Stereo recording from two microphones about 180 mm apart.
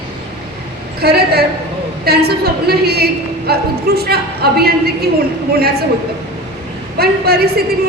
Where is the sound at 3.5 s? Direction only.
60° right (ahead or behind).